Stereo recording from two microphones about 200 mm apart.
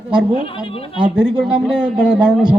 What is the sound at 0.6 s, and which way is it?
Speech, 30° left (ahead or behind).